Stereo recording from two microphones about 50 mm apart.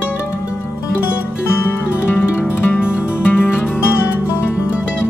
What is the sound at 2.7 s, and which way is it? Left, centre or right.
Music, left.